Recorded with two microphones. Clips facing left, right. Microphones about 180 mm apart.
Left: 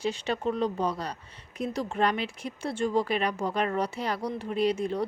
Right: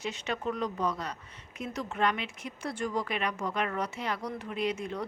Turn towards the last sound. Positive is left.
turn(degrees=35)  # may be behind; listen again after turning